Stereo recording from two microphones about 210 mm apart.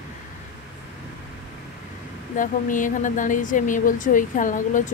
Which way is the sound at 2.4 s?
40° left (ahead or behind).